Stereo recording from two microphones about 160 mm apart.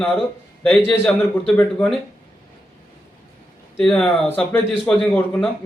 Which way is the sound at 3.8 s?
5° left (ahead or behind).